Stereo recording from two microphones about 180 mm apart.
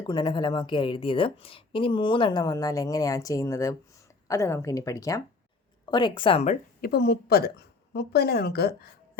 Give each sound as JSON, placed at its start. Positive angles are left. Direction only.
{"t": 0.1, "sound": "a woman's voice", "side_deg": 25}
{"t": 6.8, "sound": "a woman's voice", "side_deg": 60}